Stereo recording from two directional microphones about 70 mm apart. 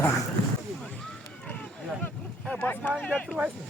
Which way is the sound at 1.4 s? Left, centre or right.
Left.